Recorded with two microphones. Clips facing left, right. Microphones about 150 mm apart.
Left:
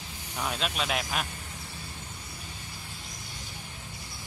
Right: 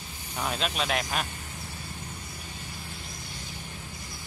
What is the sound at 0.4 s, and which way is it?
Speech, centre (ahead or behind).